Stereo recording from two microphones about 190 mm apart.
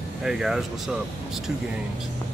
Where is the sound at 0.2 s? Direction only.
Centre (ahead or behind).